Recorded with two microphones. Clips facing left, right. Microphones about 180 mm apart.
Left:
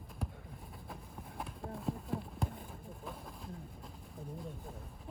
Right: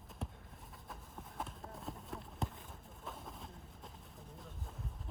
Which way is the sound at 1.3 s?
Centre (ahead or behind).